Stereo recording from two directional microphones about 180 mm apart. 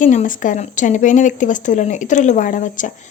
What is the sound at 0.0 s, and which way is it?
A woman's voice, 45° left (ahead or behind).